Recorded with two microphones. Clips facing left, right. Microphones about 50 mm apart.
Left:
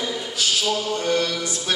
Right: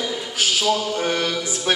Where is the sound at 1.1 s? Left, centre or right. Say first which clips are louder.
Even; right.